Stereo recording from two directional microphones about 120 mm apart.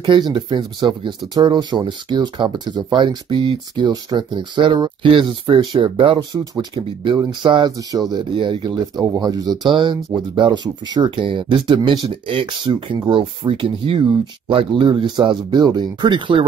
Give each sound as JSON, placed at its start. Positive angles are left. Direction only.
{"t": 0.0, "sound": "speech", "side_deg": -35}
{"t": 9.0, "sound": "speech", "side_deg": -30}